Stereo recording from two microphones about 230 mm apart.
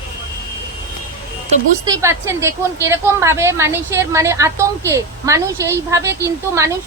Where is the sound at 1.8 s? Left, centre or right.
Centre.